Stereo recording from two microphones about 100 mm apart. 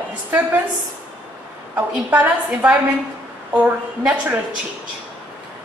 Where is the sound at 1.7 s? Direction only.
15° right (ahead or behind).